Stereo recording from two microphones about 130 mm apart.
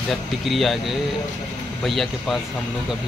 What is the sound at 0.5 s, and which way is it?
Speech, centre (ahead or behind).